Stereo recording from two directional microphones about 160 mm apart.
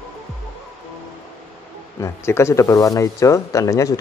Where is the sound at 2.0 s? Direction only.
15° left (ahead or behind).